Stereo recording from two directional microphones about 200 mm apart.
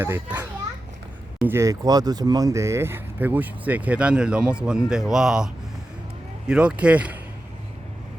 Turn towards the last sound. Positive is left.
turn(degrees=-5)  # may be behind; listen again after turning